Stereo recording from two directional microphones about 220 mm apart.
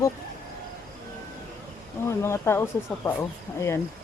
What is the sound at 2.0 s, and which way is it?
Speech, 10° left (ahead or behind).